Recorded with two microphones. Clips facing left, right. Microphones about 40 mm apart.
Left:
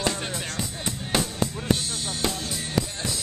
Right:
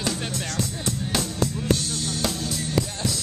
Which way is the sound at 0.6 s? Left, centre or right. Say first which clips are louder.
Right 3 dB; centre.